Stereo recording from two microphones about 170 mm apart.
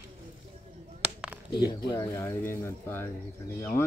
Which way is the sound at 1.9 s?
15° left (ahead or behind).